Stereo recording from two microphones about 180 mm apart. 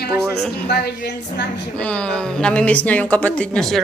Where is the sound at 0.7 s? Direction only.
65° left (ahead or behind).